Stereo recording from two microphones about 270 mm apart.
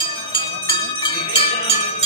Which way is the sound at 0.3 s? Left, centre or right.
Centre.